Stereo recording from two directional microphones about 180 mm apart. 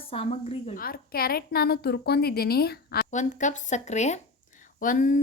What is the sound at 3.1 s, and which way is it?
Speech, 45° left (ahead or behind).